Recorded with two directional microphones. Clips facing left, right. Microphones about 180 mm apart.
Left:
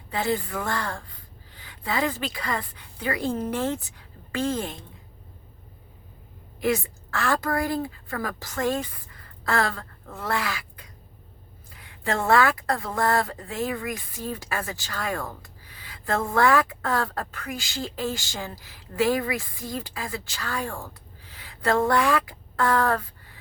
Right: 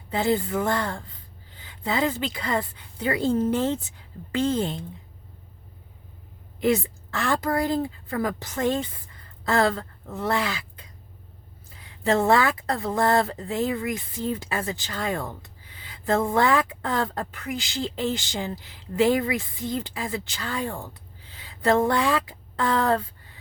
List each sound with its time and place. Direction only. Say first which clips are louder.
0.1 s speech: right 3 dB; 25° right (ahead or behind)
6.6 s a woman's voice: right 2 dB; 20° right (ahead or behind)